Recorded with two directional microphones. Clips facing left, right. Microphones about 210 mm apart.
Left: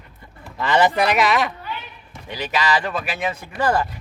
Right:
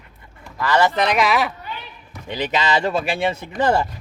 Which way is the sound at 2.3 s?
25° right (ahead or behind).